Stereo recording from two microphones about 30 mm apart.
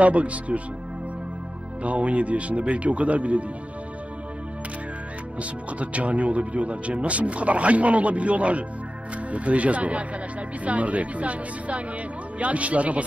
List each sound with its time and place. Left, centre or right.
0.0 s speech: right
1.8 s speech: right
5.4 s speech: right